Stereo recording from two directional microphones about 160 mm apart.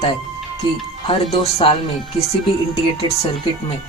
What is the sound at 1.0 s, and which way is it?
Speech, 35° left (ahead or behind).